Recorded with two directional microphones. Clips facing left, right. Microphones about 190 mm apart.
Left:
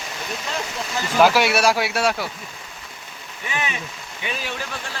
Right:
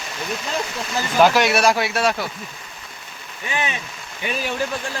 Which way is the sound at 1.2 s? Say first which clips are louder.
Right 1 dB; 5° left (ahead or behind).